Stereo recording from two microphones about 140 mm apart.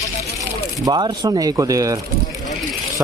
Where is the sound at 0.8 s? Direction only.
30° right (ahead or behind).